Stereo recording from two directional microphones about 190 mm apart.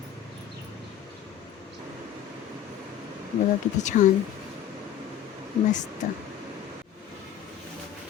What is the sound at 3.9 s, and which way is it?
Speech, 40° left (ahead or behind).